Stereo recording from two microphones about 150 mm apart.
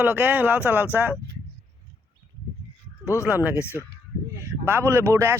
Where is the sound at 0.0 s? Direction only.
10° right (ahead or behind).